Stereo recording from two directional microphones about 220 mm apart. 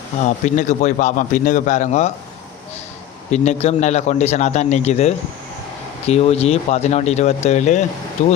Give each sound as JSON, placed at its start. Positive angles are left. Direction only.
{"t": 0.3, "sound": "a man's voice", "side_deg": 35}
{"t": 3.2, "sound": "a man's voice", "side_deg": 30}